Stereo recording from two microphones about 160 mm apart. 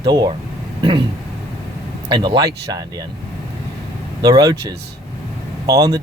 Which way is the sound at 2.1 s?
30° right (ahead or behind).